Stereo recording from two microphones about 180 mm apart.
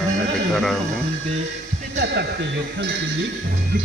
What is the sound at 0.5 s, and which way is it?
Speech, centre (ahead or behind).